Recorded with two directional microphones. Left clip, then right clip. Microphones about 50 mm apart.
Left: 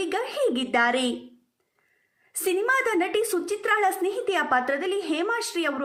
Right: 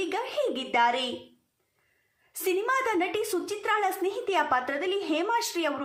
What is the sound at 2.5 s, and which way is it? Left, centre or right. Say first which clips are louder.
A woman's voice: left 3 dB; left.